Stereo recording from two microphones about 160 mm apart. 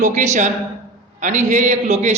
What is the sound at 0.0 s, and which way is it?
A man's voice, 50° right (ahead or behind).